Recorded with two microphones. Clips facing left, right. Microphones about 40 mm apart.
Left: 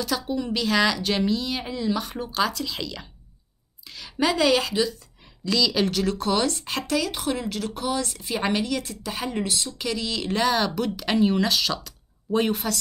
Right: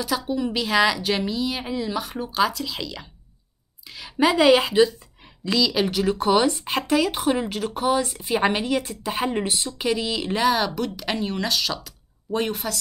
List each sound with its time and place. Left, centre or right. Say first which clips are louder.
0.0 s a woman's voice: right 2 dB; centre; by 5.6 s right
5.6 s a woman's voice: right 1 dB; centre